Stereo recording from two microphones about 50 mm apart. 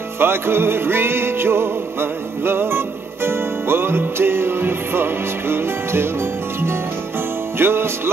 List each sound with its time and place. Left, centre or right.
0.2 s music: right
7.5 s music: right